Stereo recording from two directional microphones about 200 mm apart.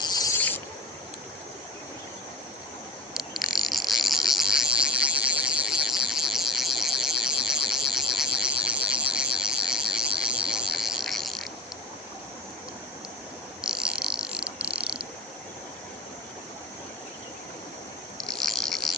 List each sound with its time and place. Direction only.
0.0 s insect: 20° left (ahead or behind)
3.2 s frog: centre (ahead or behind)
10.4 s a sound: 5° right (ahead or behind)
13.6 s frog: 5° right (ahead or behind)
18.3 s cricket: centre (ahead or behind)